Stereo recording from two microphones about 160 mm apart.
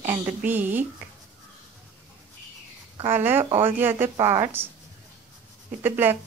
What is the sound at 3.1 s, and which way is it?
A woman's voice, 15° right (ahead or behind).